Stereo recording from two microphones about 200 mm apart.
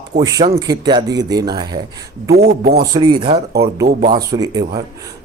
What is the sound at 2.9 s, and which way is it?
Speech, 20° right (ahead or behind).